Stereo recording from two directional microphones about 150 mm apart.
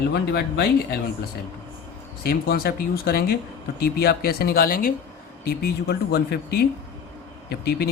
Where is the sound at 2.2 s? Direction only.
85° left.